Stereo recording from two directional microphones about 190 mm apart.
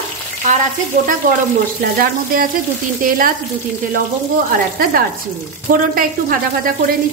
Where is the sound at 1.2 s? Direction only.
45° right (ahead or behind).